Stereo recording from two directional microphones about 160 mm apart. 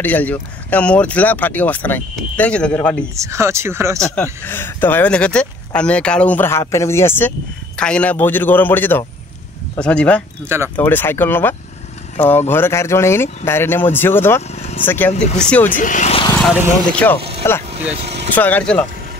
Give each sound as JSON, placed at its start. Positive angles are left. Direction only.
{"t": 0.0, "sound": "speech", "side_deg": 10}
{"t": 3.2, "sound": "speech", "side_deg": -20}
{"t": 4.0, "sound": "speech", "side_deg": 10}
{"t": 14.5, "sound": "speech", "side_deg": 45}
{"t": 14.9, "sound": "speech", "side_deg": 10}
{"t": 15.8, "sound": "speech", "side_deg": 55}
{"t": 16.9, "sound": "speech", "side_deg": 10}
{"t": 17.9, "sound": "speech", "side_deg": -45}
{"t": 18.3, "sound": "speech", "side_deg": 10}